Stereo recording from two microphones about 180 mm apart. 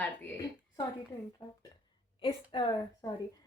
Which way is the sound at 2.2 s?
30° left (ahead or behind).